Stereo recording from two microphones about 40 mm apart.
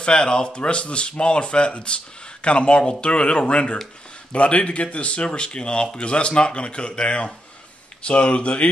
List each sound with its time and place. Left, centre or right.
0.0 s speech: centre